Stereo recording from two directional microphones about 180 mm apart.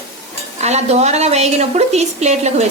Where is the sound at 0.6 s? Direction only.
35° right (ahead or behind).